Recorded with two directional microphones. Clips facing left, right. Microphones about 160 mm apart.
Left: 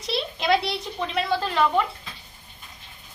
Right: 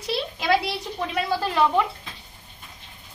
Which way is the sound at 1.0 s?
10° right (ahead or behind).